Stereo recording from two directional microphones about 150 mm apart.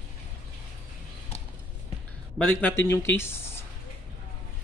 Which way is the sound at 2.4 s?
10° left (ahead or behind).